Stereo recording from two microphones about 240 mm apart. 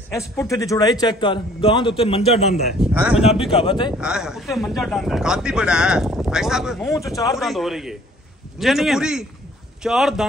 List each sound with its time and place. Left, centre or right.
0.1 s a man's voice: centre
2.8 s a man's voice: centre
3.2 s a man's voice: left
4.0 s a man's voice: centre
6.9 s speech: centre
7.3 s a man's voice: centre